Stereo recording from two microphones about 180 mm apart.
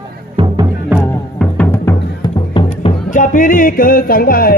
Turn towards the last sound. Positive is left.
turn(degrees=55)  # may be behind; listen again after turning